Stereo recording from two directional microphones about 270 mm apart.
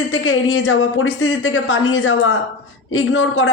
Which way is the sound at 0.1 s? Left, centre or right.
Left.